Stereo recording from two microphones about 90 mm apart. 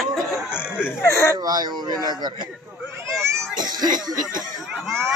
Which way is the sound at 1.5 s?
50° right (ahead or behind).